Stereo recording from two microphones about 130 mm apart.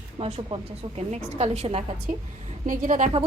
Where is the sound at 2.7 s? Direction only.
90° right.